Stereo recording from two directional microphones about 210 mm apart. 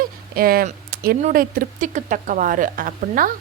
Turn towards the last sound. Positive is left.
turn(degrees=-40)  # may be behind; listen again after turning